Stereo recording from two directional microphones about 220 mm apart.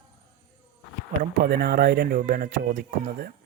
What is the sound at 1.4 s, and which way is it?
Speech, 45° right (ahead or behind).